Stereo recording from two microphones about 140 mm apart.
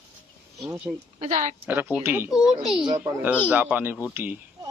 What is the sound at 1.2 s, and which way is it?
Speech, 55° right (ahead or behind).